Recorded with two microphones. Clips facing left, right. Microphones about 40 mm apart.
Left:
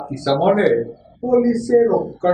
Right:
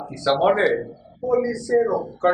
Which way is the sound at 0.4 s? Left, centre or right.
Centre.